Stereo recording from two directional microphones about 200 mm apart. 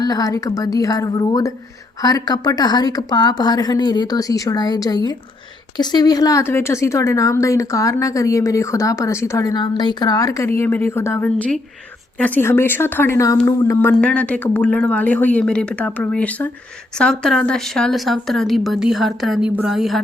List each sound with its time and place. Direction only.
0.0 s a woman's voice: 20° left (ahead or behind); by 20.0 s centre (ahead or behind)